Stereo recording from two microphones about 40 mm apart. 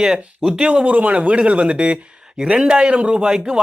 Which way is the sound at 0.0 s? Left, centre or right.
Centre.